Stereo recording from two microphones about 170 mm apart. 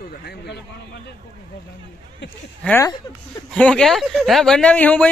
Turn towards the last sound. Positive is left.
turn(degrees=10)  # may be behind; listen again after turning